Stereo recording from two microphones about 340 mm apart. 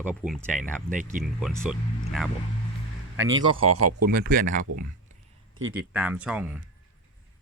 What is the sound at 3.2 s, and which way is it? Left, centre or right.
Speech, right.